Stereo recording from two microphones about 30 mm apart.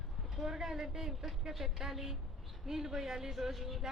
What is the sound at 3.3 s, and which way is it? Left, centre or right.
Speech, centre.